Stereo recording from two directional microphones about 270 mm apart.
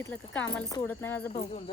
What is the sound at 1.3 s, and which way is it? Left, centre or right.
Speech, left.